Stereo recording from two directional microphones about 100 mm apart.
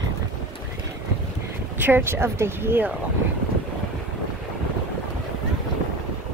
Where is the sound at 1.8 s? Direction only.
20° right (ahead or behind).